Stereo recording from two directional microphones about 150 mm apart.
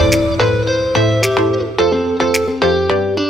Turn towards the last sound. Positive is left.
turn(degrees=0)  # may be behind; listen again after turning